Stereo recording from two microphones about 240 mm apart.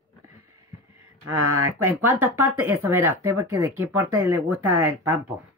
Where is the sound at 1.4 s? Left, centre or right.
Right.